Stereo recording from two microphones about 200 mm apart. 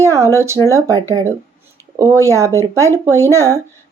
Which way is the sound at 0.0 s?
15° right (ahead or behind).